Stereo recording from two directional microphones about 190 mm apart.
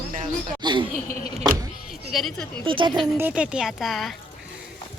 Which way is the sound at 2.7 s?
25° right (ahead or behind).